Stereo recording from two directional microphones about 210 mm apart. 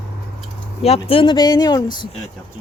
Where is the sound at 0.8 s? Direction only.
30° left (ahead or behind).